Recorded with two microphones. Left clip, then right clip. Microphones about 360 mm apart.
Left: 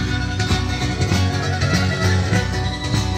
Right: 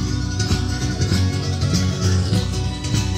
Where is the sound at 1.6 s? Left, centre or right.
Centre.